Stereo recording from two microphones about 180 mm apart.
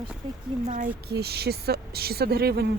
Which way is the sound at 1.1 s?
60° right (ahead or behind).